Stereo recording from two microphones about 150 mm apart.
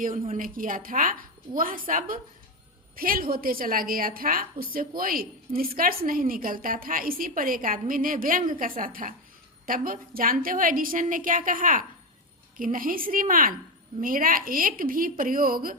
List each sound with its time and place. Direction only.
0.3 s a woman's voice: 65° right (ahead or behind)